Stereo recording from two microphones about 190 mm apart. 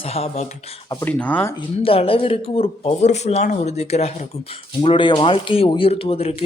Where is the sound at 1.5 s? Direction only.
30° left (ahead or behind).